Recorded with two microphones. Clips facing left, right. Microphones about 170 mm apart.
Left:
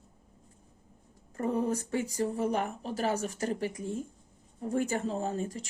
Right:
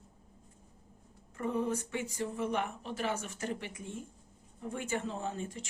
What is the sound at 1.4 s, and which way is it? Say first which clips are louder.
Speech: left 3 dB; 40° left (ahead or behind).